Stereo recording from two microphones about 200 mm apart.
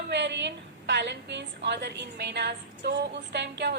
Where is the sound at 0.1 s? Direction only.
60° right (ahead or behind).